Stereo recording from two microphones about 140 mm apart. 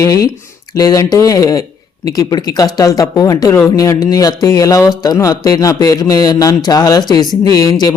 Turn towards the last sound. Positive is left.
turn(degrees=30)  # may be behind; listen again after turning